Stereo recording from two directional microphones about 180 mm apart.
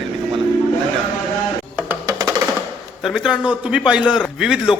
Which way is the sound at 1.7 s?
15° right (ahead or behind).